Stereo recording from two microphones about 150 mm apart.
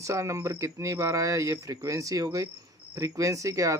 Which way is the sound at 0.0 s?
20° right (ahead or behind).